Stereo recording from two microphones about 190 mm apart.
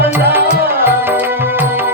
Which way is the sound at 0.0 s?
10° right (ahead or behind).